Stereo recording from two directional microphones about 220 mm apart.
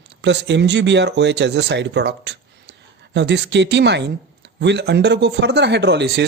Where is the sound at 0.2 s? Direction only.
55° right (ahead or behind).